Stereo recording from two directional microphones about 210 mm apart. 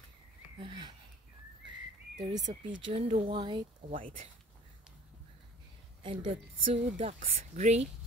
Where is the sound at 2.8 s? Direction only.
30° right (ahead or behind).